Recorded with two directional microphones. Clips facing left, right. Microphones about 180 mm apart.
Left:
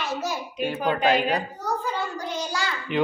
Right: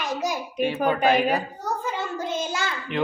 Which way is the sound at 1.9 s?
20° right (ahead or behind).